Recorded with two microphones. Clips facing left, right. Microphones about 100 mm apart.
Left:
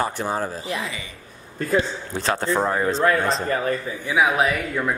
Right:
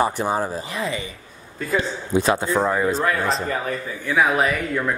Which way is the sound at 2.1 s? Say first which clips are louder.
Right 3 dB; 15° right (ahead or behind).